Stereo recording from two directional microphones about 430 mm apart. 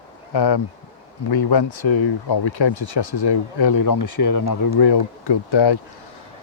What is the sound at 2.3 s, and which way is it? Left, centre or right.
Speech, left.